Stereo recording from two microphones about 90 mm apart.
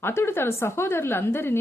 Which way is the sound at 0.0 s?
25° left (ahead or behind).